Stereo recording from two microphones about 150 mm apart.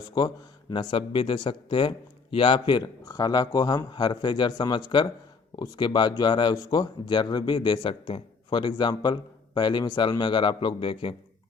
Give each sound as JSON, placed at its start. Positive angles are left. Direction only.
{"t": 0.7, "sound": "speech", "side_deg": 35}